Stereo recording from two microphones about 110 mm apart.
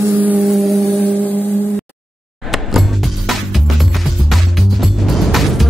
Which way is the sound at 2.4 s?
Centre (ahead or behind).